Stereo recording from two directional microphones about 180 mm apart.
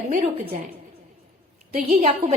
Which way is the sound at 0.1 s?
35° right (ahead or behind).